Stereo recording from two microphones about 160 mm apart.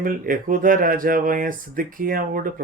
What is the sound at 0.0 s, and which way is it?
Speech, 60° right (ahead or behind).